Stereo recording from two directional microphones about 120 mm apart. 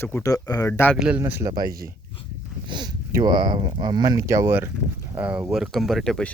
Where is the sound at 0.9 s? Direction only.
10° right (ahead or behind).